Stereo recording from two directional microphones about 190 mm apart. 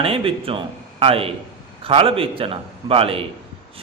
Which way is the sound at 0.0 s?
30° right (ahead or behind).